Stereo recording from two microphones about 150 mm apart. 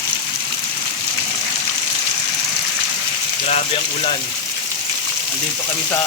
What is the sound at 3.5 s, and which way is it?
Speech, 45° left (ahead or behind).